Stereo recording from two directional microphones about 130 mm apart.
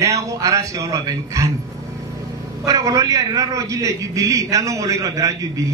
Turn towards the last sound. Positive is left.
turn(degrees=-25)  # may be behind; listen again after turning